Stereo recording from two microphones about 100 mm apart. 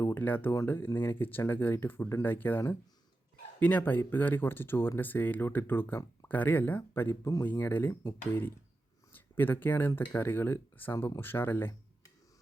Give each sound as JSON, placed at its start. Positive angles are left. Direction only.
{"t": 0.0, "sound": "speech", "side_deg": 20}
{"t": 3.6, "sound": "speech", "side_deg": 15}